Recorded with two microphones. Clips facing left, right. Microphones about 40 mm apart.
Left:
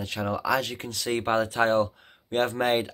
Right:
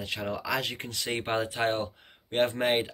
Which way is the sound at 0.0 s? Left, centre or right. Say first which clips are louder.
Left 4 dB; centre.